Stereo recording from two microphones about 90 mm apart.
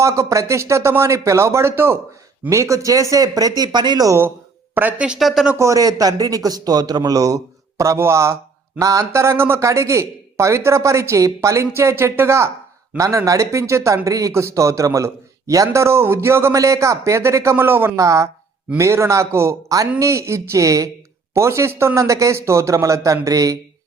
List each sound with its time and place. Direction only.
0.0 s speech: 35° right (ahead or behind)
4.7 s speech: 20° right (ahead or behind); by 5.5 s 5° right (ahead or behind)
5.5 s a man's voice: 35° right (ahead or behind)
18.0 s speech: 35° right (ahead or behind)